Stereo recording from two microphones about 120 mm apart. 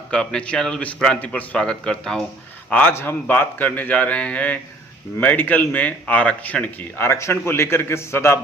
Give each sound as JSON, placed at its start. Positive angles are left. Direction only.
{"t": 0.1, "sound": "speech", "side_deg": 10}